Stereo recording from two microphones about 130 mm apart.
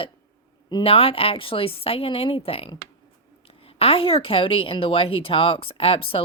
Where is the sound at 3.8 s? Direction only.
45° left (ahead or behind).